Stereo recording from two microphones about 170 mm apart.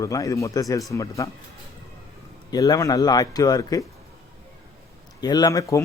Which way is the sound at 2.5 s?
20° left (ahead or behind).